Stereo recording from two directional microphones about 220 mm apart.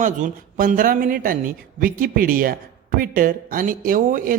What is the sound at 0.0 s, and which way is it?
Speech, 40° right (ahead or behind).